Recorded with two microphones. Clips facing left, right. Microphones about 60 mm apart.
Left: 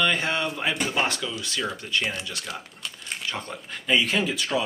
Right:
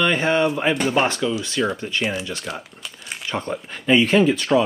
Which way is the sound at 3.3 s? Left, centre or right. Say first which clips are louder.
Right 10 dB; right.